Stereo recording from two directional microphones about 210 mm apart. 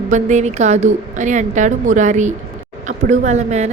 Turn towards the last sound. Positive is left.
turn(degrees=-35)  # may be behind; listen again after turning